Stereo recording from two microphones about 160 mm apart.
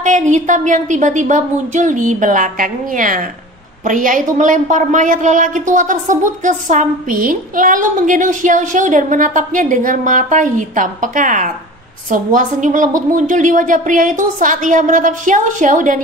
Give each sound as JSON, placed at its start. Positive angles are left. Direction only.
{"t": 0.0, "sound": "a woman's voice", "side_deg": -50}